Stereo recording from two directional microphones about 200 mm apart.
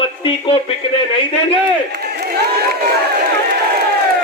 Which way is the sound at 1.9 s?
55° right (ahead or behind).